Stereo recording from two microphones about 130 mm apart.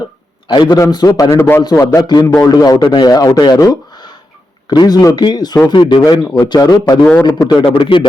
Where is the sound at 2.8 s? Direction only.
45° left (ahead or behind).